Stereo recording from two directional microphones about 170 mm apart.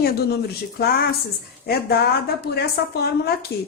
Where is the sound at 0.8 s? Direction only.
65° left (ahead or behind).